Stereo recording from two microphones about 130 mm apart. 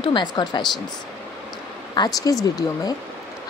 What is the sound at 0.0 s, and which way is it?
Speech, 35° left (ahead or behind).